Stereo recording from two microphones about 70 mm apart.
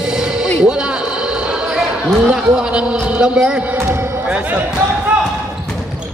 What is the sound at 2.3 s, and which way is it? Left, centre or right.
A man's voice, centre.